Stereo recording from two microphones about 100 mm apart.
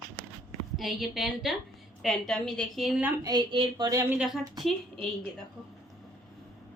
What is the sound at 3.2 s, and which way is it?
Speech, 50° right (ahead or behind).